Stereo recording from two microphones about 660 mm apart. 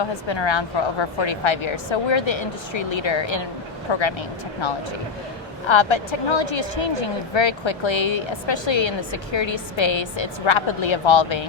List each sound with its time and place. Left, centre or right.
0.1 s speech: left
5.6 s speech: left